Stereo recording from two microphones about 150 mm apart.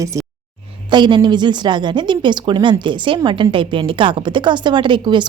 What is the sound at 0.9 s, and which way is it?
A woman's voice, 30° right (ahead or behind).